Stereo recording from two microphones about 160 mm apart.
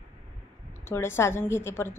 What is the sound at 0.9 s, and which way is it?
A woman's voice, 15° left (ahead or behind).